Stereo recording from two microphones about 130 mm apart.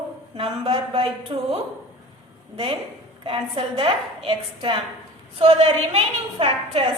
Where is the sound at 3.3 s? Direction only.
45° right (ahead or behind).